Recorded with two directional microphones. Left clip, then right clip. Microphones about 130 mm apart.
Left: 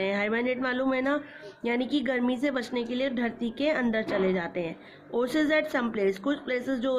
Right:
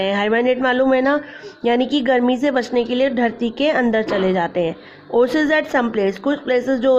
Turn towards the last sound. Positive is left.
turn(degrees=-35)  # may be behind; listen again after turning